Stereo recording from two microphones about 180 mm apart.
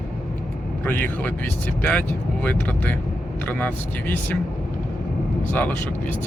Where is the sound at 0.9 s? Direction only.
10° left (ahead or behind).